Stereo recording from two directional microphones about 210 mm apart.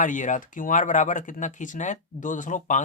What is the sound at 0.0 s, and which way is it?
Speech, 35° left (ahead or behind).